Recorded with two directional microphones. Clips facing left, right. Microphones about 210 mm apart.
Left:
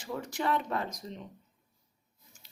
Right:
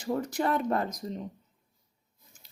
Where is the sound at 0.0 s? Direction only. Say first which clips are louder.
Right 5 dB; 40° right (ahead or behind).